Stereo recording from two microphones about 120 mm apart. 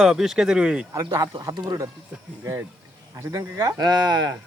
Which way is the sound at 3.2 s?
25° right (ahead or behind).